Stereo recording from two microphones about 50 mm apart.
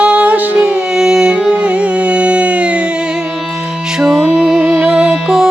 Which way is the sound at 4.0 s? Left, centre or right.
Centre.